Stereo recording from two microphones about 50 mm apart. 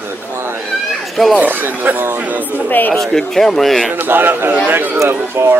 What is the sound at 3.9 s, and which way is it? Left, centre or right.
A man's voice, right.